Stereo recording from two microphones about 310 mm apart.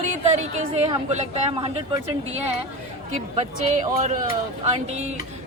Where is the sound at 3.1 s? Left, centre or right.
Right.